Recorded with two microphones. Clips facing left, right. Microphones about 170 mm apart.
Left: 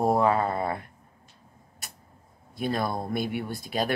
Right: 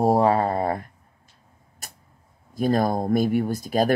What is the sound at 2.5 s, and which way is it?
Speech, 40° right (ahead or behind).